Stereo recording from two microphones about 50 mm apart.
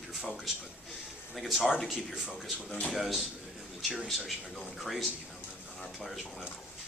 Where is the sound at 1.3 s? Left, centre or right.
Centre.